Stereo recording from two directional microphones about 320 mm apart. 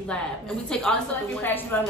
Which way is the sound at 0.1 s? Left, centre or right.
Centre.